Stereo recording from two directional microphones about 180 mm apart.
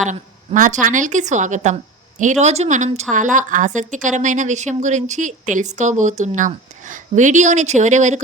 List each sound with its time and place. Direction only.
0.0 s a woman's voice: 45° right (ahead or behind)